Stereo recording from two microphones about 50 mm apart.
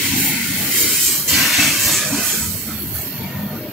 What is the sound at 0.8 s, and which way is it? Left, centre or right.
Hiss, centre.